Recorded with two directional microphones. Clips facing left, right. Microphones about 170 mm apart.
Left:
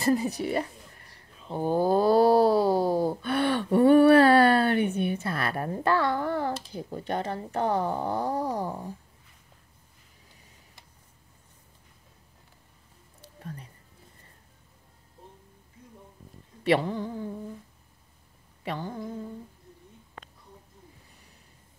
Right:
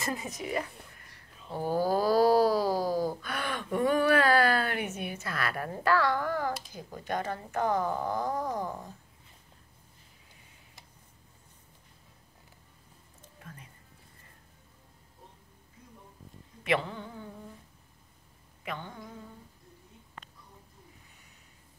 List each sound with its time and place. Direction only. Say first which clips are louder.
0.0 s speech: left 10 dB; 35° left (ahead or behind)
13.4 s music: left 9 dB; 35° left (ahead or behind)
16.6 s mantra: left 6 dB; 35° left (ahead or behind)
18.6 s a sound: left 6 dB; 35° left (ahead or behind)